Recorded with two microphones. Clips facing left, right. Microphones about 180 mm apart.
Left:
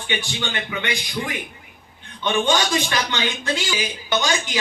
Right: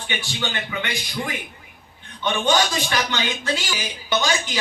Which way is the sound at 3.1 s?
15° left (ahead or behind).